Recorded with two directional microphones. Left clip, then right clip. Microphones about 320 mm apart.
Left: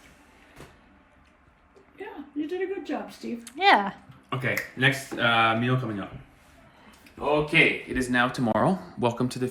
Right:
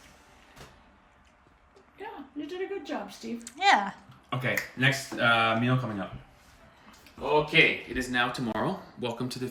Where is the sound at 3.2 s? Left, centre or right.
Centre.